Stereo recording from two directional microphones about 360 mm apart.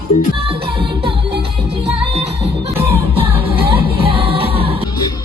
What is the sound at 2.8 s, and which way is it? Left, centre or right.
Music, centre.